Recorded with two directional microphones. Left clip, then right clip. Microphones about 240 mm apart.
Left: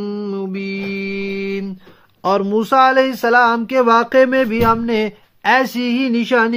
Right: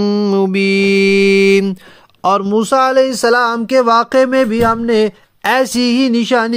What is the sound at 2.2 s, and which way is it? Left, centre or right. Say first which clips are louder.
Speech: right 3 dB; right.